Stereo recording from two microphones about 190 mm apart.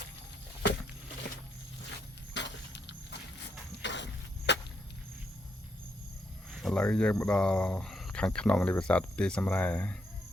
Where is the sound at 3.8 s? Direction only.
70° left (ahead or behind).